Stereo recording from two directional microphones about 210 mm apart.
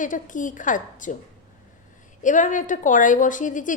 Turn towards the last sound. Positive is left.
turn(degrees=40)  # may be behind; listen again after turning